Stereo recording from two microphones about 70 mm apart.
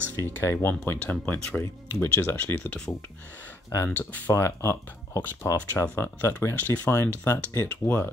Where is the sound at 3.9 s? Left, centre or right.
Left.